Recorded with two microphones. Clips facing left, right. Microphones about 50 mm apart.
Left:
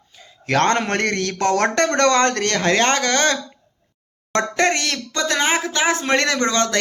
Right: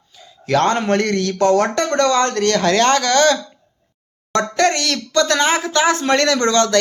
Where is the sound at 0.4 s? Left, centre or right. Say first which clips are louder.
Right 2 dB; left.